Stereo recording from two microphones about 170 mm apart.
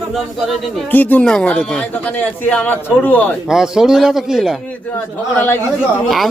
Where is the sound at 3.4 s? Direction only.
5° right (ahead or behind).